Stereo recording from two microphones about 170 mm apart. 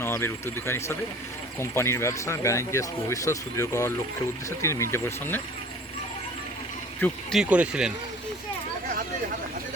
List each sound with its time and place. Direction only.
0.0 s speech: 15° left (ahead or behind)
7.0 s speech: 5° left (ahead or behind)